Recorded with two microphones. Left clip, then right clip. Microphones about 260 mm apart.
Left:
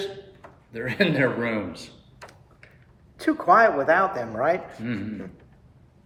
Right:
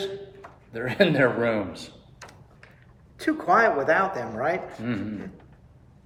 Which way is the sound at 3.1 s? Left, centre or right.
Centre.